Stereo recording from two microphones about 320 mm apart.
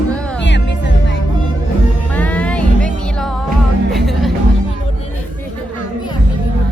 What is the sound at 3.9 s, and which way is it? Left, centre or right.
Music, centre.